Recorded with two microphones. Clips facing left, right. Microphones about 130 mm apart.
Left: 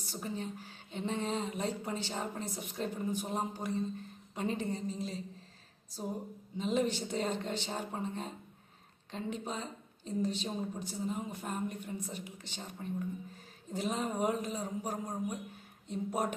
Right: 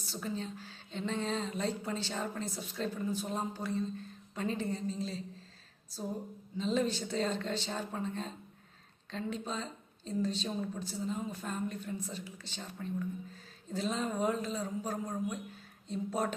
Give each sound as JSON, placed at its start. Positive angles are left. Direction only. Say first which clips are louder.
{"t": 0.0, "sound": "a woman's voice", "louder": "right 1 dB", "side_deg": 15}
{"t": 6.6, "sound": "a woman's voice", "louder": "even", "side_deg": 15}